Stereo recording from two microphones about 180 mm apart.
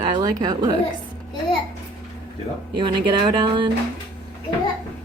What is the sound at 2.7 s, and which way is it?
Speech, 25° right (ahead or behind).